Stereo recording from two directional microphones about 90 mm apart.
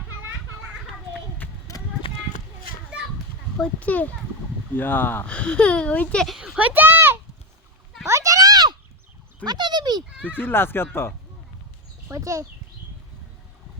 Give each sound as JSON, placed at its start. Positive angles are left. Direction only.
{"t": 1.4, "sound": "clip-clop", "side_deg": 20}
{"t": 3.8, "sound": "speech", "side_deg": 15}
{"t": 5.2, "sound": "speech", "side_deg": 10}
{"t": 6.4, "sound": "speech", "side_deg": -15}
{"t": 8.0, "sound": "a sound", "side_deg": -35}
{"t": 10.2, "sound": "speech", "side_deg": 20}
{"t": 12.1, "sound": "speech", "side_deg": -35}